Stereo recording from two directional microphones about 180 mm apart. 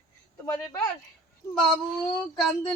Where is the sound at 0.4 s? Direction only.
15° left (ahead or behind).